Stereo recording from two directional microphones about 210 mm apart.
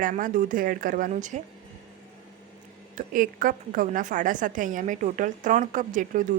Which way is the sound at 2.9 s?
40° right (ahead or behind).